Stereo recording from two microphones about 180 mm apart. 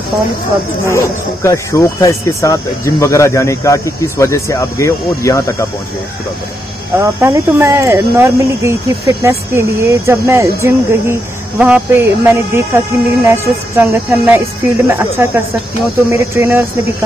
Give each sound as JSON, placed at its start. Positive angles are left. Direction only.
{"t": 0.8, "sound": "speech", "side_deg": 15}
{"t": 7.0, "sound": "speech", "side_deg": -15}